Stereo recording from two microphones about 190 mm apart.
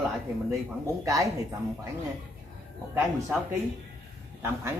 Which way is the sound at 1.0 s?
15° right (ahead or behind).